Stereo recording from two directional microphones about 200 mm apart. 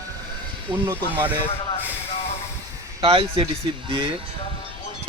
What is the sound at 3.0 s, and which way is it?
Speech, 25° right (ahead or behind).